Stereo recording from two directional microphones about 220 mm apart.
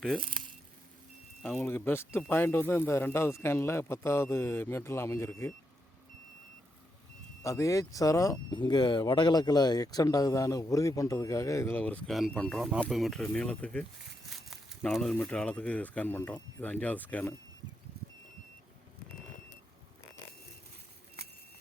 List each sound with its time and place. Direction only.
0.2 s speech: 25° right (ahead or behind)
1.4 s speech: 5° left (ahead or behind)
7.4 s speech: 15° left (ahead or behind)